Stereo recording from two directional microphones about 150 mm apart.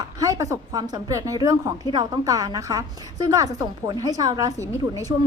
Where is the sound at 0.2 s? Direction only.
20° right (ahead or behind).